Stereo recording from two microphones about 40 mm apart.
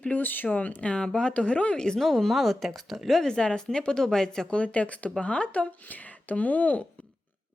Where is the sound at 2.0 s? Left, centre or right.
Centre.